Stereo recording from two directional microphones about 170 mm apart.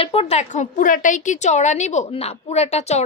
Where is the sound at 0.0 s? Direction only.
35° left (ahead or behind).